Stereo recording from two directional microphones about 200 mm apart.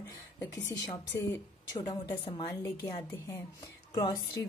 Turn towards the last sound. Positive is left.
turn(degrees=20)  # may be behind; listen again after turning